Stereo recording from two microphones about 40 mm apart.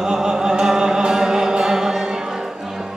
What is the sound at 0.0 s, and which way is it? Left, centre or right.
Music, centre.